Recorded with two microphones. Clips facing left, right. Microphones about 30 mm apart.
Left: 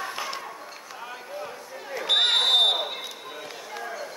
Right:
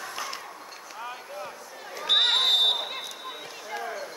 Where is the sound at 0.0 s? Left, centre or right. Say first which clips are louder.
Left 3 dB; centre.